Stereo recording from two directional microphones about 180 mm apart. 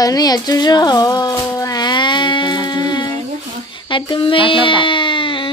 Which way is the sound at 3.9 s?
30° left (ahead or behind).